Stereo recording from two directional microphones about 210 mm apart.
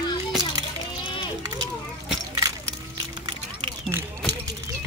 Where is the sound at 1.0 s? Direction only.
25° left (ahead or behind).